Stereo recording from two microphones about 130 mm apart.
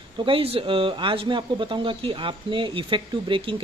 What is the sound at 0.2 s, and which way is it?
Speech, 45° right (ahead or behind).